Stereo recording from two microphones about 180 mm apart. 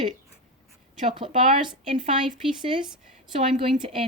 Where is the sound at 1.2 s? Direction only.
30° right (ahead or behind).